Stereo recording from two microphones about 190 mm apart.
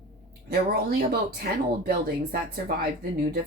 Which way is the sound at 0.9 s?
55° right (ahead or behind).